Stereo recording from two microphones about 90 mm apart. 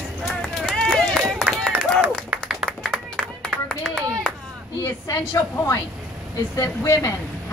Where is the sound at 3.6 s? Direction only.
5° left (ahead or behind).